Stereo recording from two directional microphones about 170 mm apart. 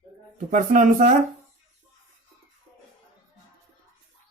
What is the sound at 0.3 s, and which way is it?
Speech, 50° right (ahead or behind).